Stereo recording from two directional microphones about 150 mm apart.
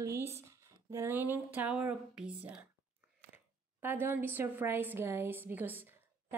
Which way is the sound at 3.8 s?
15° right (ahead or behind).